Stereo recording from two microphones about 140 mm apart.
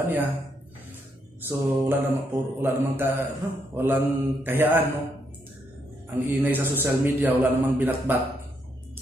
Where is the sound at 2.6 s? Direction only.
15° right (ahead or behind).